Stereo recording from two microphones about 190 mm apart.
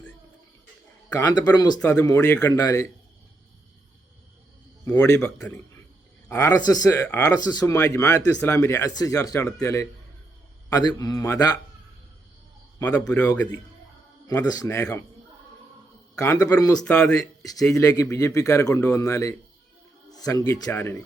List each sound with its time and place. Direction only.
1.1 s speech: 20° left (ahead or behind)
4.9 s speech: 20° left (ahead or behind)
13.2 s speech: 15° left (ahead or behind)
16.1 s speech: 15° left (ahead or behind)
16.8 s speech: 5° left (ahead or behind)
17.2 s speech: 20° left (ahead or behind)